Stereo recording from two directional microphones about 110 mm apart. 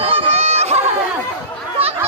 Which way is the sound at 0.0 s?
60° right (ahead or behind).